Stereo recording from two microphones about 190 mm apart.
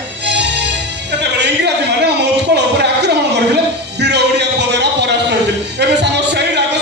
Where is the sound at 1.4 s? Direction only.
65° right (ahead or behind).